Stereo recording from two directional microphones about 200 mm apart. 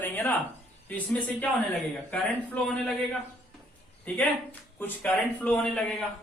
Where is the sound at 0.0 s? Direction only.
10° left (ahead or behind).